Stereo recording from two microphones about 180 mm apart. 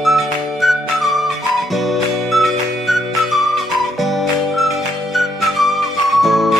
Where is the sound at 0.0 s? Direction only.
Centre (ahead or behind).